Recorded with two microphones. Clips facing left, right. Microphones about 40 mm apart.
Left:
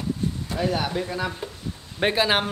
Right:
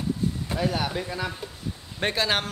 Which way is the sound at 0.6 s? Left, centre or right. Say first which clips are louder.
Left 3 dB; centre.